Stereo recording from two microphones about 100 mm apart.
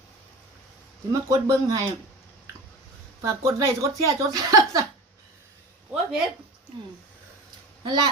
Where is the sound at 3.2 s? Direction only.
30° right (ahead or behind).